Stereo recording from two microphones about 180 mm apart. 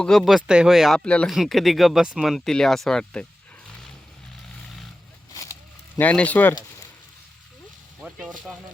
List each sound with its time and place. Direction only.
0.0 s speech: centre (ahead or behind)
5.3 s a sound: 20° left (ahead or behind)
6.0 s speech: 10° left (ahead or behind)
8.0 s speech: 5° right (ahead or behind)